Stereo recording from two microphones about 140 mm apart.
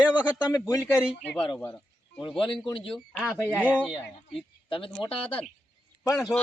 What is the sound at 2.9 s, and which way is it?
Speech, 5° left (ahead or behind).